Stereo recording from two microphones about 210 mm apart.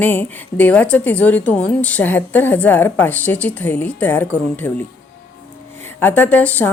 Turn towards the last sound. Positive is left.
turn(degrees=10)  # may be behind; listen again after turning